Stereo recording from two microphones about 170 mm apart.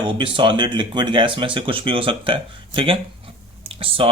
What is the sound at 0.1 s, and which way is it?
Speech, 30° right (ahead or behind).